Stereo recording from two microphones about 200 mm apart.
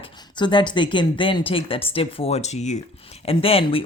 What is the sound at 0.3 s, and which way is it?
A woman's voice, 25° left (ahead or behind).